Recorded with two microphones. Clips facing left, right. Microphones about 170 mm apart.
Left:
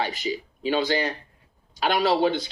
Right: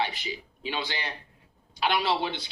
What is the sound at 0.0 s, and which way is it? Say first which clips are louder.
Speech: left 4 dB; 40° left (ahead or behind).